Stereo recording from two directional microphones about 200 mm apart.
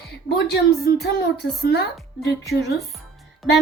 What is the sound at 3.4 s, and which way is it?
Music, centre (ahead or behind).